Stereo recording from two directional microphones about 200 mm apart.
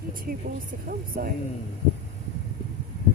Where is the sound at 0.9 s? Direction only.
45° right (ahead or behind).